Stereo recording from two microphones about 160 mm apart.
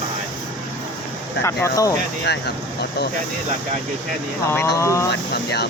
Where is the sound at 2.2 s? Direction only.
90° left.